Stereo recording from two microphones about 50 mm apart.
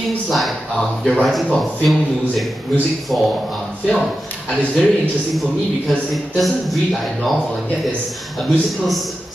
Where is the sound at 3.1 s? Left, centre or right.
Left.